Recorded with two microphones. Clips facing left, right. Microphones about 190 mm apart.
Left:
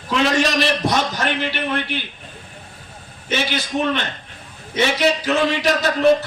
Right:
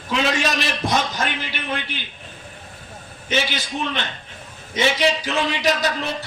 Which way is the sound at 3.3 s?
40° left (ahead or behind).